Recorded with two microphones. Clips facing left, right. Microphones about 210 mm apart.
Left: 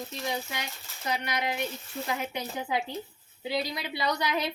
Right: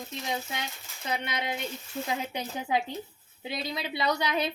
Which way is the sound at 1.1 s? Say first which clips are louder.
Left 1 dB; 25° right (ahead or behind).